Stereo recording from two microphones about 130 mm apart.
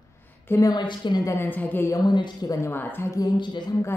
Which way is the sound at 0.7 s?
35° left (ahead or behind).